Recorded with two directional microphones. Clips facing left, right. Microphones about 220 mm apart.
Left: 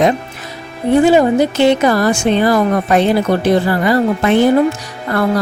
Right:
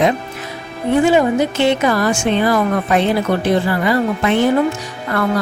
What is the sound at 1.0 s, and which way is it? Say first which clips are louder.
Speech: left 3 dB; 35° left (ahead or behind).